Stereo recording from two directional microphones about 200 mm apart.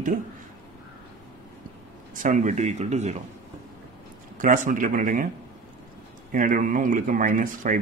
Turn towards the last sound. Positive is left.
turn(degrees=-40)  # may be behind; listen again after turning